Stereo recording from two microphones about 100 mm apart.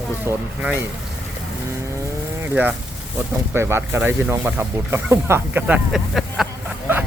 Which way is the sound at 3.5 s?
25° right (ahead or behind).